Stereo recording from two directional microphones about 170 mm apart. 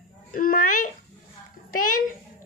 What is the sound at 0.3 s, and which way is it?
Speech, 55° left (ahead or behind).